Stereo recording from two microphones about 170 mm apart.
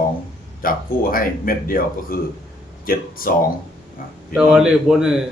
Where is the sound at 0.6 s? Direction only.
55° left (ahead or behind).